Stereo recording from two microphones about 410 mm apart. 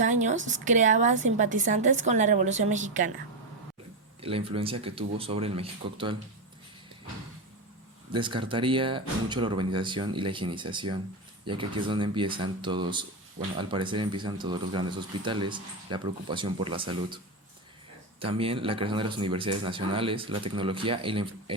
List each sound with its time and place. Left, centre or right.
0.0 s speech: centre
4.2 s speech: centre
8.1 s speech: centre
18.2 s speech: centre